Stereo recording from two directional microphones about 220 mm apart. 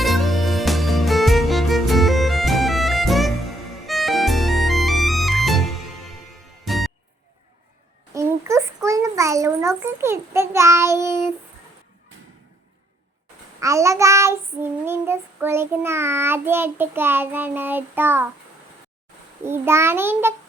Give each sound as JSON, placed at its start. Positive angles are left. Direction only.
{"t": 0.0, "sound": "music", "side_deg": 0}
{"t": 8.1, "sound": "a sound", "side_deg": -15}
{"t": 13.6, "sound": "child singing", "side_deg": -15}
{"t": 19.5, "sound": "a child's voice", "side_deg": -10}